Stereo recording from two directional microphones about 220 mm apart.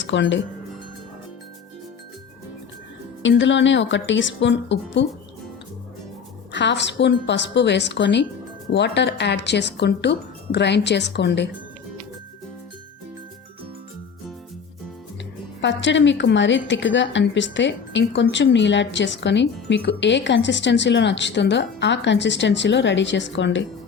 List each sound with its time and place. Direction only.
0.0 s speech: 55° left (ahead or behind)
3.2 s a woman's voice: 55° left (ahead or behind)
6.5 s a woman's voice: 50° left (ahead or behind)
15.6 s a woman's voice: 55° left (ahead or behind)